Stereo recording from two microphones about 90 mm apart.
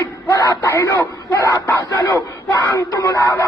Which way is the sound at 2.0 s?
30° left (ahead or behind).